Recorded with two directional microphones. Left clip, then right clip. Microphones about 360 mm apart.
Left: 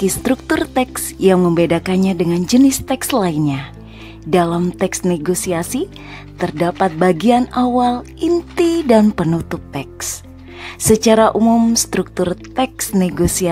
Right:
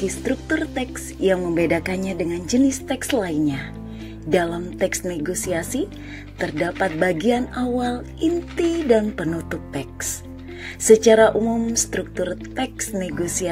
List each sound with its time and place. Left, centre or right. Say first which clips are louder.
0.2 s speech: left 6 dB; left